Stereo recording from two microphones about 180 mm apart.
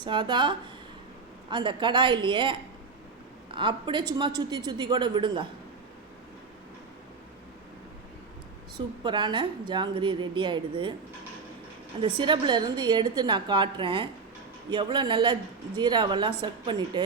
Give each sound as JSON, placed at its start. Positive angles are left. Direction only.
{"t": 0.0, "sound": "a woman's voice", "side_deg": -25}
{"t": 9.0, "sound": "a woman's voice", "side_deg": -25}
{"t": 11.9, "sound": "a woman's voice", "side_deg": -30}